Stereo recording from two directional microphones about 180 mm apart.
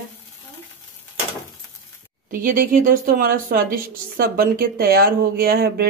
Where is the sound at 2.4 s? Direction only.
50° right (ahead or behind).